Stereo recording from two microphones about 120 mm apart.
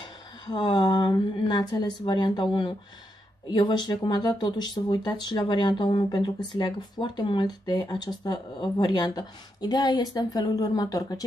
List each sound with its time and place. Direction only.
0.0 s speech: 40° left (ahead or behind)